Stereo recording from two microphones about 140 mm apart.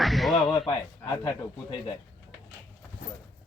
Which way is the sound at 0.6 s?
30° left (ahead or behind).